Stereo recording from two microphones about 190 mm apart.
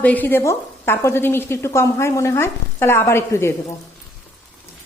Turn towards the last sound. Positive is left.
turn(degrees=15)  # may be behind; listen again after turning